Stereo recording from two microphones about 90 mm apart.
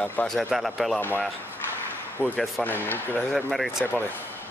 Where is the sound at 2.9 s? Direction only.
20° left (ahead or behind).